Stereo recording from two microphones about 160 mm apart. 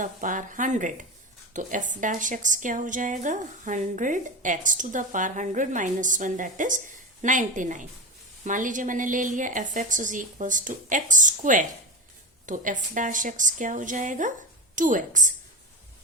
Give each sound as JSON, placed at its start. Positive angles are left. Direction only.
{"t": 0.0, "sound": "a woman's voice", "side_deg": -55}